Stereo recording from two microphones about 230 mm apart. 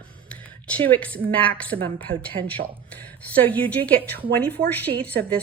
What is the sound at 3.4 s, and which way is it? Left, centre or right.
A woman's voice, centre.